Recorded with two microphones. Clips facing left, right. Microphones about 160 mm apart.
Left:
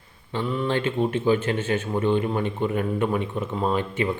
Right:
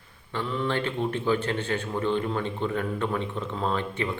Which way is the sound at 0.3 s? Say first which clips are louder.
Left 3 dB; 15° left (ahead or behind).